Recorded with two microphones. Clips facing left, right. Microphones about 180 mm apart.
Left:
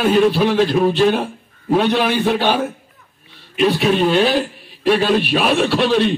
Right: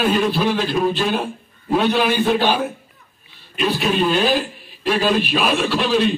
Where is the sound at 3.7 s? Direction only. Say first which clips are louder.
Left 2 dB; 65° left (ahead or behind).